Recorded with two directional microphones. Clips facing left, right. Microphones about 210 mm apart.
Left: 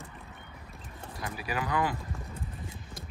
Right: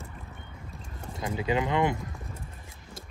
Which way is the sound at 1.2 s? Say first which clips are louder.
Right 7 dB; 20° right (ahead or behind).